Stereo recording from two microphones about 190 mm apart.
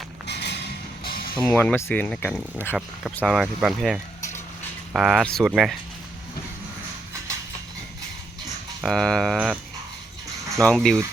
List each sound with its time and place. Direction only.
0.3 s a sound: 60° left (ahead or behind)
1.4 s speech: 10° left (ahead or behind)
8.8 s speech: centre (ahead or behind)